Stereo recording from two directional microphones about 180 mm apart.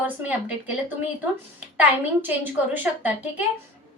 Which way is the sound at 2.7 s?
10° right (ahead or behind).